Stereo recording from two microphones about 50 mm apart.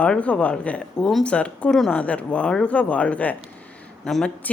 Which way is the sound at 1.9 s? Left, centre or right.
Left.